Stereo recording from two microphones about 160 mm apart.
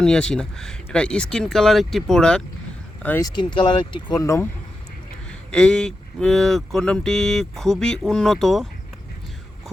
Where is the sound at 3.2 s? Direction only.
25° left (ahead or behind).